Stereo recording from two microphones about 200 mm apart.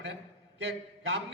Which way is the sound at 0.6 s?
60° right (ahead or behind).